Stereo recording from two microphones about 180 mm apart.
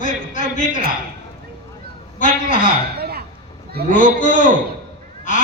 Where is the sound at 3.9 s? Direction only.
45° left (ahead or behind).